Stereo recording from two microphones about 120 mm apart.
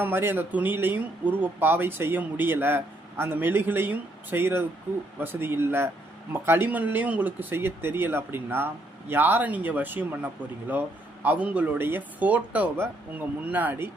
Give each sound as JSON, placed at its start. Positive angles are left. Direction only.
{"t": 0.0, "sound": "speech", "side_deg": -20}